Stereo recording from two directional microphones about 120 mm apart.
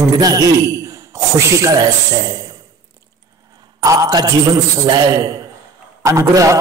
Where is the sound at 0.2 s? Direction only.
30° right (ahead or behind).